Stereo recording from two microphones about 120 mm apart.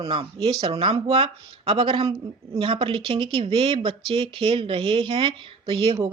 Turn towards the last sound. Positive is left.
turn(degrees=-50)  # may be behind; listen again after turning